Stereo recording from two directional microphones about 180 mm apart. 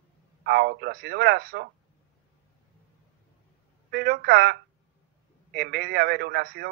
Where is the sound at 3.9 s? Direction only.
60° right (ahead or behind).